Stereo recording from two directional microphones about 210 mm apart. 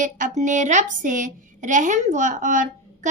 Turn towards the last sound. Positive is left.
turn(degrees=-35)  # may be behind; listen again after turning